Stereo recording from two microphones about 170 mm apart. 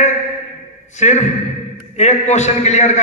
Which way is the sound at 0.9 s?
45° left (ahead or behind).